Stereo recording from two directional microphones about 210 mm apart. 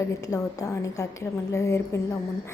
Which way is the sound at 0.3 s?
15° left (ahead or behind).